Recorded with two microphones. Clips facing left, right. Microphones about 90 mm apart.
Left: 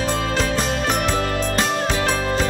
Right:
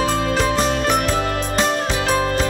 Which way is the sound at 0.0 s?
Centre (ahead or behind).